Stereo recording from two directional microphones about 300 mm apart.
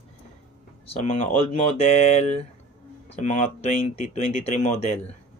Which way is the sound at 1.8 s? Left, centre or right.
Left.